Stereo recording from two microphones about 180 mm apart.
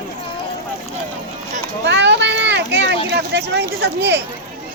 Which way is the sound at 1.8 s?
80° right.